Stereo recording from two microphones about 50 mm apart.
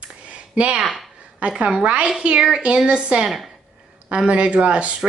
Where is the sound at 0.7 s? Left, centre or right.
Centre.